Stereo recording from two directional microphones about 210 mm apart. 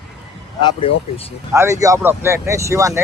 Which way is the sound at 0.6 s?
20° left (ahead or behind).